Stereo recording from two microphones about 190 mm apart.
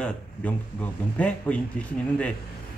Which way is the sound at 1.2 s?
5° left (ahead or behind).